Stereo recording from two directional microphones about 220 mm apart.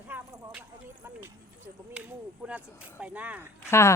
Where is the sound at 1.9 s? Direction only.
5° right (ahead or behind).